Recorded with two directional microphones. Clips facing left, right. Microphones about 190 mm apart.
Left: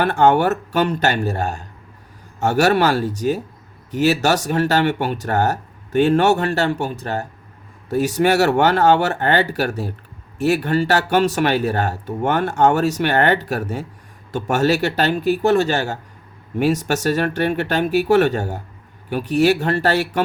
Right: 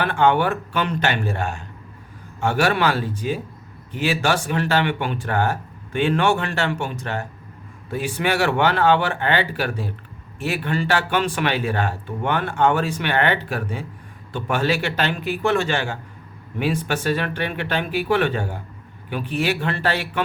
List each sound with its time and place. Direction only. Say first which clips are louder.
0.0 s a man's voice: left 3 dB; 45° left (ahead or behind)